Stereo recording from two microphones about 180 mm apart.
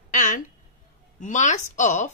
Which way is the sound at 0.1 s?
45° left (ahead or behind).